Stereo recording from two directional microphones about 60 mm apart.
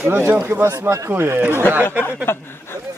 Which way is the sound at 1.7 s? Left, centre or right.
Right.